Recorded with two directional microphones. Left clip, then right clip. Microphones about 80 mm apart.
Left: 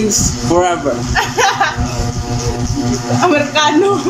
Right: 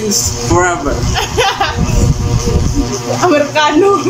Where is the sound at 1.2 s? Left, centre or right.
Centre.